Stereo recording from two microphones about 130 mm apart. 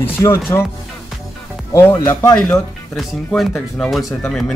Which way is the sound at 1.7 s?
25° left (ahead or behind).